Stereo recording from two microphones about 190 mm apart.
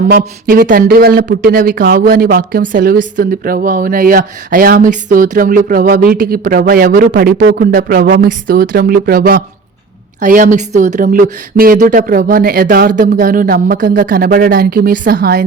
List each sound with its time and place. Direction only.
0.4 s speech: 50° right (ahead or behind)